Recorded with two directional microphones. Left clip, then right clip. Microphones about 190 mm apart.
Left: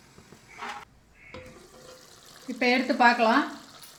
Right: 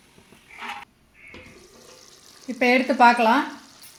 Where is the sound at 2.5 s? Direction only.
50° right (ahead or behind).